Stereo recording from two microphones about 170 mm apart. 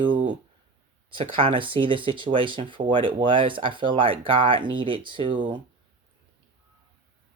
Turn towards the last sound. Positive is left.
turn(degrees=-30)  # may be behind; listen again after turning